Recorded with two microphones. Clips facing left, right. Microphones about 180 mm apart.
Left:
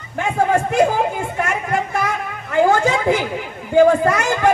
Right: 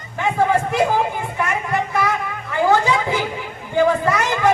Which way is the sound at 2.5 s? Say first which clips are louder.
Left 2 dB; 45° left (ahead or behind).